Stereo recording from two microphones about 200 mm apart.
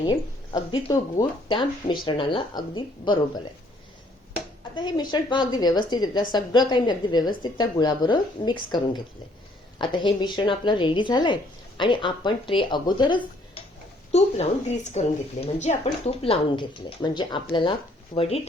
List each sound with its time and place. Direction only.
0.0 s a woman's voice: 20° left (ahead or behind)
4.7 s a woman's voice: 20° left (ahead or behind)